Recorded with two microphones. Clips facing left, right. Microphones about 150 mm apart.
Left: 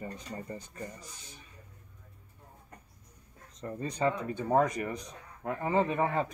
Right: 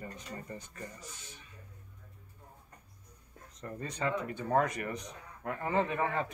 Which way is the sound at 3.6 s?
20° left (ahead or behind).